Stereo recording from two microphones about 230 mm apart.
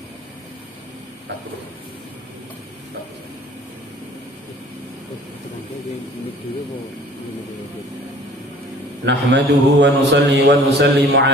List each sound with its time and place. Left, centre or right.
9.0 s a man's voice: right